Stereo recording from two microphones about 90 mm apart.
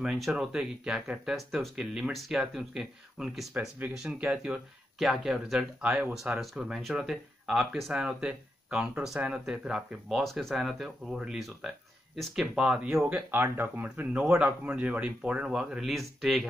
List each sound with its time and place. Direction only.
0.0 s speech: 5° right (ahead or behind)
13.1 s speech: 20° right (ahead or behind); by 16.4 s centre (ahead or behind)